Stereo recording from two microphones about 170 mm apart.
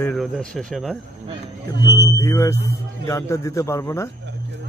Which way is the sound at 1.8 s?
15° right (ahead or behind).